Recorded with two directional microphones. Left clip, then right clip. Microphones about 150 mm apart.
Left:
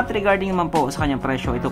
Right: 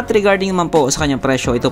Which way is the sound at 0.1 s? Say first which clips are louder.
Right 11 dB; 40° right (ahead or behind).